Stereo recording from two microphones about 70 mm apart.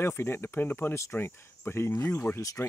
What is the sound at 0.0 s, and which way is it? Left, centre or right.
Speech, left.